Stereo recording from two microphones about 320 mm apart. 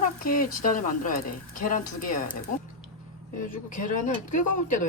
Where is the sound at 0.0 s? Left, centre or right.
Left.